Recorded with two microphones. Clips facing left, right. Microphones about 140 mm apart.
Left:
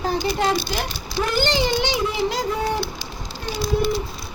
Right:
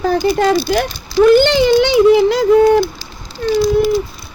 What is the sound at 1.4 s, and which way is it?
Speech, 65° right (ahead or behind).